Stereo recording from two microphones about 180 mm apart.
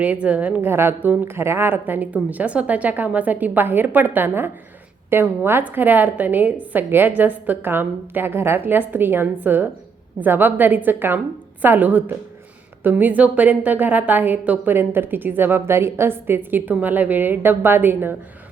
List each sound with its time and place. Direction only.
0.0 s a woman's voice: 10° right (ahead or behind)